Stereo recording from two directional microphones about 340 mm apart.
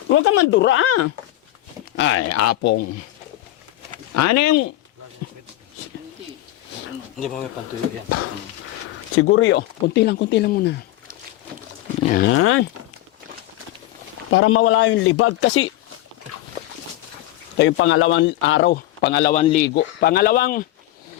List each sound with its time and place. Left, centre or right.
0.2 s a man's voice: left
2.0 s a man's voice: left
2.3 s speech: left
4.1 s speech: left
9.1 s speech: left
11.9 s a sound: centre
12.2 s a man's voice: left
14.3 s a man's voice: left
17.6 s a man's voice: left